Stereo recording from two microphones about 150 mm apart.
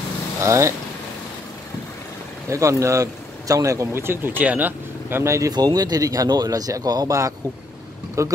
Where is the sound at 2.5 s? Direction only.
20° right (ahead or behind).